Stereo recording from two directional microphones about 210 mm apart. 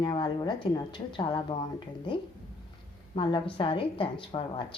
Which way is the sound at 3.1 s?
25° left (ahead or behind).